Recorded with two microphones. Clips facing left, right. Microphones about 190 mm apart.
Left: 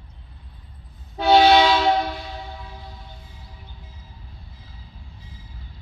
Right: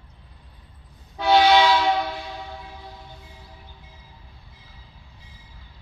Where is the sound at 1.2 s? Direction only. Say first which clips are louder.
Left 2 dB; 30° left (ahead or behind).